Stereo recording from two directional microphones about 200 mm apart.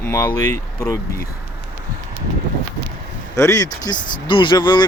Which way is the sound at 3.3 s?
15° left (ahead or behind).